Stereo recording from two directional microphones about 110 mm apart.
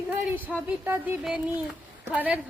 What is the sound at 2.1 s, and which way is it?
Speech, 10° right (ahead or behind).